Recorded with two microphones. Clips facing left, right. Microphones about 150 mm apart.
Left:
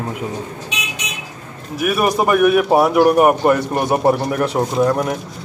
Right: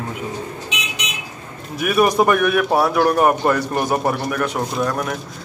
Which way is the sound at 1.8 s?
5° left (ahead or behind).